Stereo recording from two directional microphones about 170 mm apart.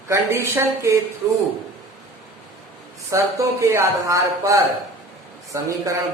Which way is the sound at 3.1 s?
15° right (ahead or behind).